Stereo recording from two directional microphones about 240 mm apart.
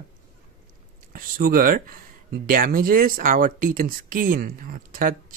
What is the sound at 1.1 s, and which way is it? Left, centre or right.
Speech, right.